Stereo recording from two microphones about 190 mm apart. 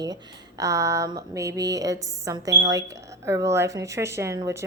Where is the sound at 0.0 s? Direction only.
20° right (ahead or behind).